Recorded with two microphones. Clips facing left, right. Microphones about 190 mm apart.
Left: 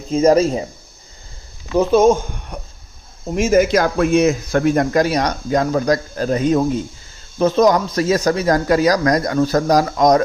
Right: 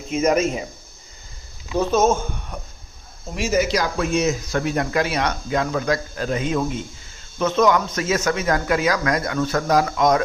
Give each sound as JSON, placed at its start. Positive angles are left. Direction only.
{"t": 0.1, "sound": "speech", "side_deg": 35}
{"t": 1.9, "sound": "speech", "side_deg": 10}
{"t": 3.3, "sound": "speech", "side_deg": 50}